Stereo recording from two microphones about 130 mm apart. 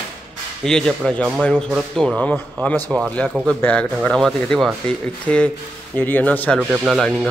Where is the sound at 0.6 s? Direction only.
5° left (ahead or behind).